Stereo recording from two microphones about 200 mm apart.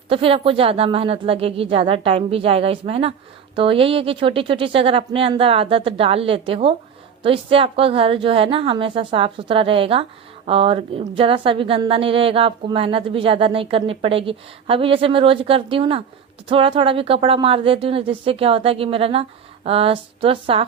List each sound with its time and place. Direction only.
0.1 s speech: 25° right (ahead or behind)